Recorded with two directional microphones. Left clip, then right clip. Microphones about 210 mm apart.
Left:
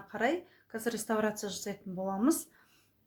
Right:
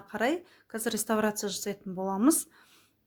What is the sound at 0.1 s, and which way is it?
Speech, 45° right (ahead or behind).